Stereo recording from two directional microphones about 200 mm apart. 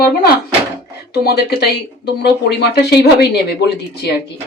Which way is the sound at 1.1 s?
55° left (ahead or behind).